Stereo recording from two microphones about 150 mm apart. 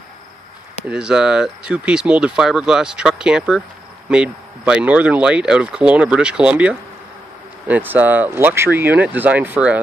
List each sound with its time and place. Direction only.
0.8 s speech: 5° right (ahead or behind)